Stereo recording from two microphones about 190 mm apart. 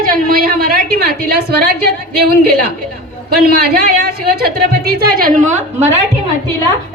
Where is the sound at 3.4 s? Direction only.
55° right (ahead or behind).